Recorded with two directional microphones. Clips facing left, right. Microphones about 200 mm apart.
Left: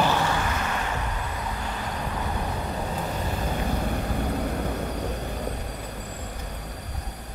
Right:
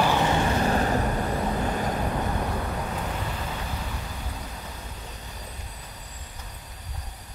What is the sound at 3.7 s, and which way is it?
Vehicle, 55° left (ahead or behind).